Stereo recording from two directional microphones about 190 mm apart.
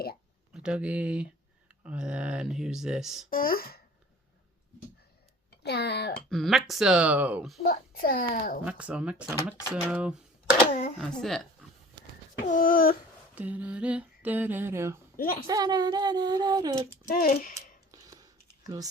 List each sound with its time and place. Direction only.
0.5 s speech: 5° right (ahead or behind)
3.2 s a child's voice: 50° left (ahead or behind)
5.5 s speech: 60° left (ahead or behind)
6.2 s speech: centre (ahead or behind)
7.7 s a child's voice: 50° left (ahead or behind)
8.6 s speech: 5° right (ahead or behind)
10.7 s a child's voice: 45° left (ahead or behind)
10.9 s speech: centre (ahead or behind)
12.5 s a child's voice: 45° left (ahead or behind)
13.3 s a sound: 10° right (ahead or behind)
15.1 s a sound: 45° left (ahead or behind)
15.4 s a sound: 20° right (ahead or behind)
17.1 s a child's voice: 45° left (ahead or behind)
17.9 s computer keyboard: 20° right (ahead or behind)